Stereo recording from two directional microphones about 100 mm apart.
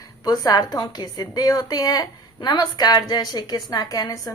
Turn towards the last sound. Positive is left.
turn(degrees=40)  # may be behind; listen again after turning